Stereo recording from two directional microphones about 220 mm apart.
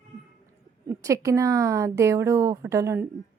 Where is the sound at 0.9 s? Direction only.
15° right (ahead or behind).